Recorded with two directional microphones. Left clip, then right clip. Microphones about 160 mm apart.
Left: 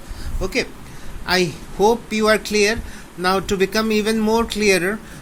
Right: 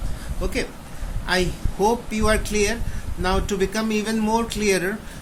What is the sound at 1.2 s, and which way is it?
Speech, 30° left (ahead or behind).